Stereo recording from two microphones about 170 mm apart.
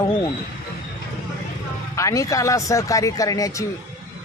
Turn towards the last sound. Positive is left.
turn(degrees=20)  # may be behind; listen again after turning